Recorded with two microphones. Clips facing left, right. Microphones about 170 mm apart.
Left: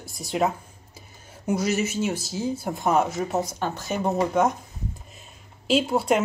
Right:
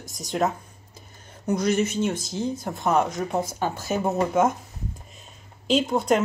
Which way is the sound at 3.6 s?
5° right (ahead or behind).